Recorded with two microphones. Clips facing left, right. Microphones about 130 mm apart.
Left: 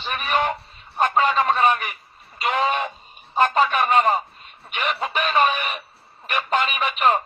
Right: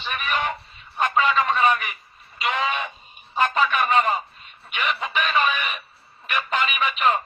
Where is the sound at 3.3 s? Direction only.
40° left (ahead or behind).